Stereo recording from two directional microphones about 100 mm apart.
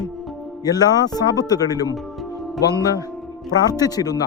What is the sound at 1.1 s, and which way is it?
Speech, 40° left (ahead or behind).